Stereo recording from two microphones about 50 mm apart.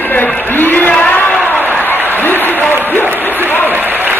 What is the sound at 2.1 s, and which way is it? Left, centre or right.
Applause, left.